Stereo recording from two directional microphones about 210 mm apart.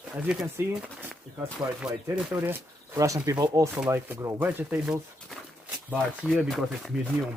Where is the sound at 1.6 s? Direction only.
20° right (ahead or behind); by 6.9 s centre (ahead or behind).